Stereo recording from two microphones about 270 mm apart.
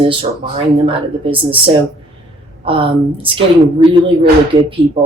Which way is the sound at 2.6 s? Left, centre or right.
Centre.